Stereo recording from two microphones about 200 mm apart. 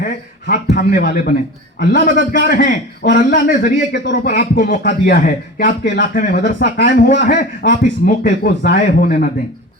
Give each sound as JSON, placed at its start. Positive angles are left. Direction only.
{"t": 0.0, "sound": "a man's voice", "side_deg": 50}